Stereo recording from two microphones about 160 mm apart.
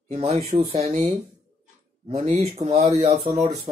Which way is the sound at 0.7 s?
40° right (ahead or behind).